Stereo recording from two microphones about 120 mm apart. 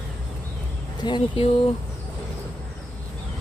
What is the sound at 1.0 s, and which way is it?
Speech, 40° left (ahead or behind).